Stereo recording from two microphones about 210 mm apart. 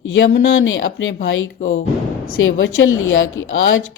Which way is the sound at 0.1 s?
65° left (ahead or behind).